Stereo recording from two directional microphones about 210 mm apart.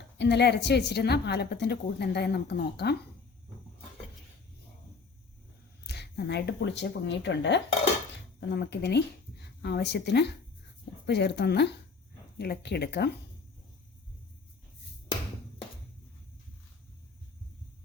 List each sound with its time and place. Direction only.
0.2 s a woman's voice: 55° left (ahead or behind)
5.8 s a woman's voice: 50° left (ahead or behind)